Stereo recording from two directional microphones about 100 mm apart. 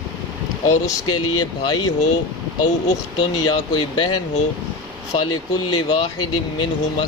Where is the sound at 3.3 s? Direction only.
45° left (ahead or behind).